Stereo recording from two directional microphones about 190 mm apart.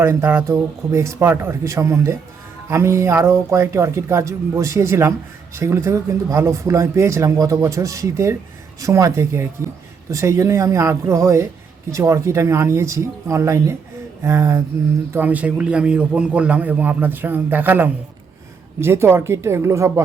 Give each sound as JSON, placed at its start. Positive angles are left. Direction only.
{"t": 0.0, "sound": "speech", "side_deg": -15}